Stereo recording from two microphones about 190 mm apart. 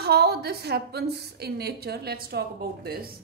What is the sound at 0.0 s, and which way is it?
A woman's voice, 55° right (ahead or behind).